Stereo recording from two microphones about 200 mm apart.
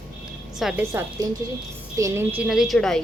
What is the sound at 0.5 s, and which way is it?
Speech, centre (ahead or behind).